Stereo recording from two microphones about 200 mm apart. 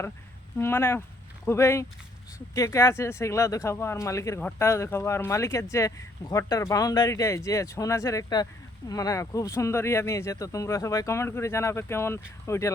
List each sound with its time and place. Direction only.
0.6 s speech: 10° left (ahead or behind)